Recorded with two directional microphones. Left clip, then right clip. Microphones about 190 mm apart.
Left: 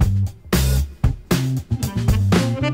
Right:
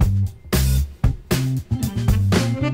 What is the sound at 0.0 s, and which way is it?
Music, centre (ahead or behind).